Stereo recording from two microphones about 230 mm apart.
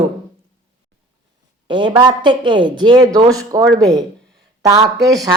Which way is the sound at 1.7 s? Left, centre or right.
Right.